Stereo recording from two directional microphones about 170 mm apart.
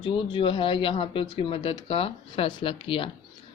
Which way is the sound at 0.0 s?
30° left (ahead or behind).